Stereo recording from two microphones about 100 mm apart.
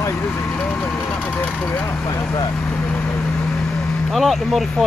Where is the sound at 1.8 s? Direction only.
30° left (ahead or behind).